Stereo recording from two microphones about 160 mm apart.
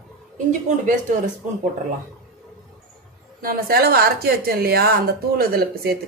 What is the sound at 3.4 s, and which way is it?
A woman's voice, 70° right (ahead or behind).